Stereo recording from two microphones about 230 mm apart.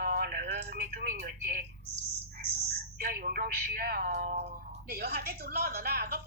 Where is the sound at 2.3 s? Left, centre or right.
Right.